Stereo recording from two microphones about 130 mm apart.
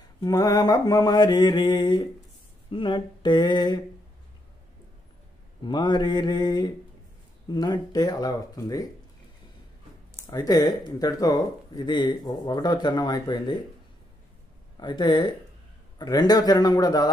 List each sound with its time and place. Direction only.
0.2 s speech: 30° left (ahead or behind)
5.6 s speech: 35° left (ahead or behind)
10.3 s speech: 30° left (ahead or behind)
14.8 s speech: 35° left (ahead or behind)